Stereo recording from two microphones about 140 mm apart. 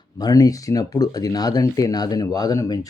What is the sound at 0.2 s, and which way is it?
Speech, 25° left (ahead or behind).